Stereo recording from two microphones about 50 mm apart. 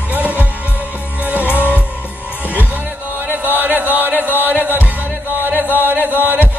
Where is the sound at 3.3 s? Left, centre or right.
Right.